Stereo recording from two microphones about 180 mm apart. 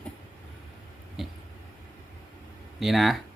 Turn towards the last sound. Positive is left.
turn(degrees=0)  # may be behind; listen again after turning